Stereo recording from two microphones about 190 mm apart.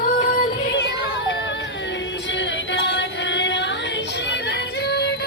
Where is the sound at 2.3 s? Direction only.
70° left (ahead or behind).